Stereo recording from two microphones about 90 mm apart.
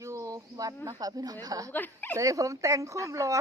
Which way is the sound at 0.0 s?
35° right (ahead or behind).